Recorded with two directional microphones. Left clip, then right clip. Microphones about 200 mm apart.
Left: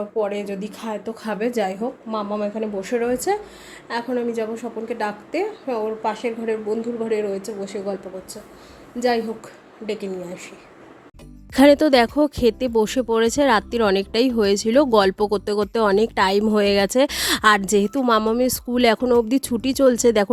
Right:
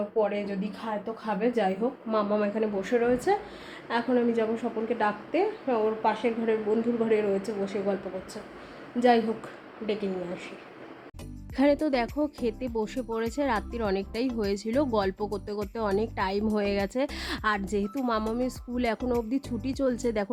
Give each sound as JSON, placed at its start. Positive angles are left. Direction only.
{"t": 0.2, "sound": "a woman's voice", "side_deg": 25}
{"t": 2.0, "sound": "a woman's voice", "side_deg": 5}
{"t": 9.0, "sound": "a woman's voice", "side_deg": 5}
{"t": 11.5, "sound": "speech", "side_deg": 50}